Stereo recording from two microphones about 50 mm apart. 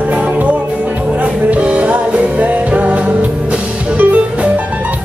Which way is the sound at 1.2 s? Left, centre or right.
Right.